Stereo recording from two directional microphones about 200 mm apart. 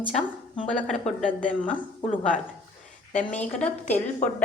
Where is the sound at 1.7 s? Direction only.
40° left (ahead or behind).